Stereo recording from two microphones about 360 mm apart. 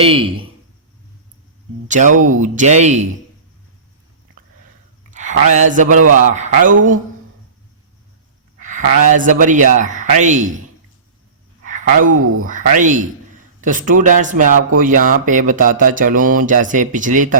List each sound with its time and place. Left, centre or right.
0.0 s speech: centre
1.9 s speech: right
5.1 s speech: centre
8.6 s speech: right
11.6 s a sound: right
12.0 s speech: right
12.5 s speech: right